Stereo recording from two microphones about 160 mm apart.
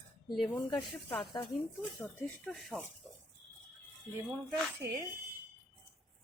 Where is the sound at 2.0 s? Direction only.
5° left (ahead or behind).